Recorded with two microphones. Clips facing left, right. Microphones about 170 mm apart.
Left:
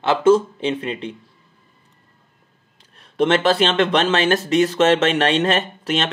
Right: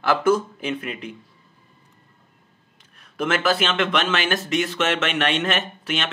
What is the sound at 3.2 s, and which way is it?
Speech, 30° left (ahead or behind).